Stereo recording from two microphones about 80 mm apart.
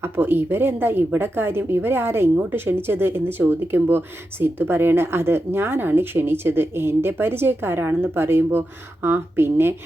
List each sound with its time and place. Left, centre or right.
0.0 s speech: right